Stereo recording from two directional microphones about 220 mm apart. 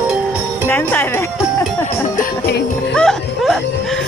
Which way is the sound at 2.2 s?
45° left (ahead or behind).